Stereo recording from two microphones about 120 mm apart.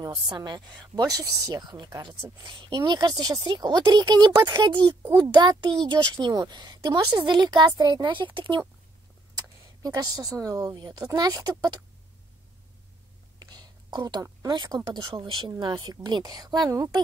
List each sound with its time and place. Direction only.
0.0 s a child's voice: 35° right (ahead or behind)
9.8 s a child's voice: 30° right (ahead or behind)
13.4 s a sound: 35° right (ahead or behind)
14.5 s a child's voice: 40° right (ahead or behind)